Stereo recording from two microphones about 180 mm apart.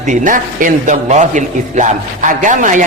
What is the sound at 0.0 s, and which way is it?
A man's voice, 45° right (ahead or behind).